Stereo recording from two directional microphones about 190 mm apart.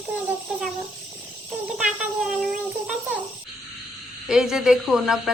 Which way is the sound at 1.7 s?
Centre (ahead or behind).